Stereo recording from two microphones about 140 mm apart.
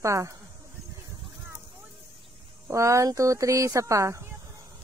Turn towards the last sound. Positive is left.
turn(degrees=-20)  # may be behind; listen again after turning